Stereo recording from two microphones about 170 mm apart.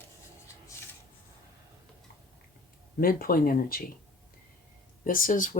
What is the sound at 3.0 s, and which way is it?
Speech, 60° left (ahead or behind).